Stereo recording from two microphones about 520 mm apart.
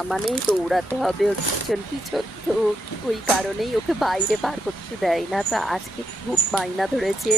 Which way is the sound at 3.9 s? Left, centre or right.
Centre.